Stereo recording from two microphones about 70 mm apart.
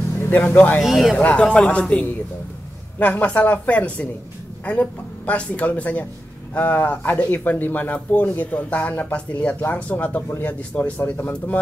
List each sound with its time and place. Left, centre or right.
0.3 s speech: left
0.8 s speech: centre
1.1 s a man's voice: centre